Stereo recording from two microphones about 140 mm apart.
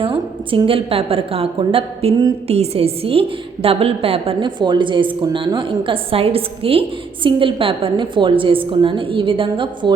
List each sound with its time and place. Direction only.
0.0 s a woman's voice: 40° right (ahead or behind)